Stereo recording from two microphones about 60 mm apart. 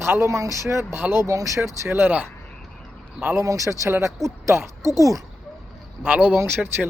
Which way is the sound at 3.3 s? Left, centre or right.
Right.